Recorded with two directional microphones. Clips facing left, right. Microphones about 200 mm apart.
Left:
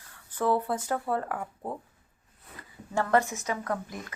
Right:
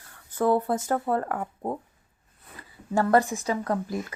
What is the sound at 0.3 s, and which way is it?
Speech, 45° right (ahead or behind).